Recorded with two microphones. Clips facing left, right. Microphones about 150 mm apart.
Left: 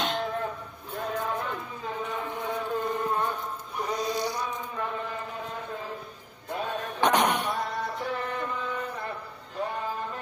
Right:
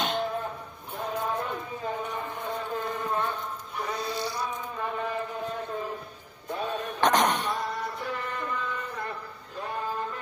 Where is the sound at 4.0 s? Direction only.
15° left (ahead or behind).